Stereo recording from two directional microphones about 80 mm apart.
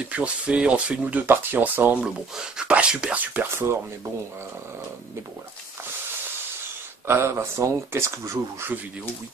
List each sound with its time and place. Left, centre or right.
0.1 s speech: centre
1.2 s speech: right
2.0 s speech: centre
3.4 s speech: right
7.1 s speech: right